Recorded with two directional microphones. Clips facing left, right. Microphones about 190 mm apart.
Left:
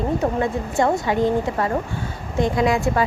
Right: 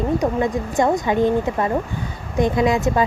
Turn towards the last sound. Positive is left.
turn(degrees=-20)  # may be behind; listen again after turning